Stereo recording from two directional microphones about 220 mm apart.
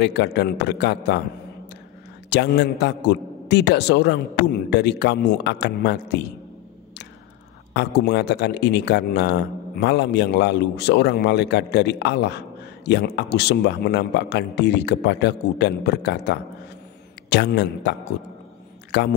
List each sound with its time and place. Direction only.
0.0 s a man's voice: 50° left (ahead or behind)
2.2 s a man's voice: 50° left (ahead or behind)
7.7 s a man's voice: 50° left (ahead or behind)